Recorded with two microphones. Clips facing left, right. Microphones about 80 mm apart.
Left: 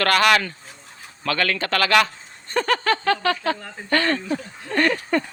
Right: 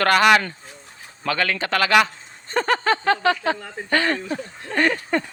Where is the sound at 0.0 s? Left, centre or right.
Centre.